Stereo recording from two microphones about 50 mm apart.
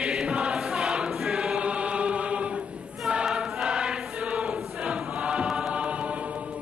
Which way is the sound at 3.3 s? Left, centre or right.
Centre.